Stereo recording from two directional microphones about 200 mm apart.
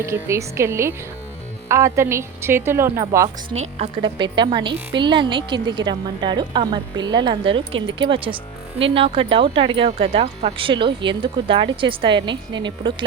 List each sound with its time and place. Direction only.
0.0 s speech: 15° right (ahead or behind)
3.5 s speech: 30° right (ahead or behind)